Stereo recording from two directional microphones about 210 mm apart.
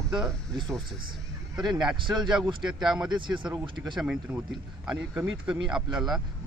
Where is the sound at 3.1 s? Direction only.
25° right (ahead or behind).